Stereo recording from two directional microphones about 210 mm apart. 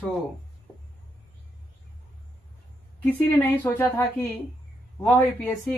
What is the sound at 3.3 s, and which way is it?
A woman's voice, 15° left (ahead or behind).